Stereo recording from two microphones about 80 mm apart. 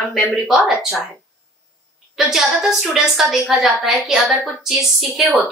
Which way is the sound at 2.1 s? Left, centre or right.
Centre.